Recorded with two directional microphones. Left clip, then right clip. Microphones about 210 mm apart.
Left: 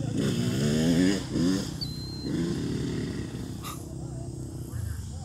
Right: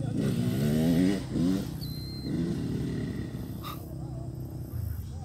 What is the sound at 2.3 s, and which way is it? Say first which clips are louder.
Vehicle: left 2 dB; 45° right (ahead or behind).